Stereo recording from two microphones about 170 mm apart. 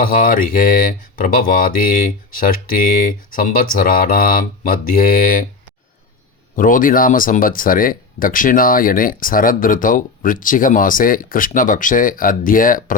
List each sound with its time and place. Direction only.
0.1 s speech: 55° left (ahead or behind)
6.6 s speech: 55° left (ahead or behind)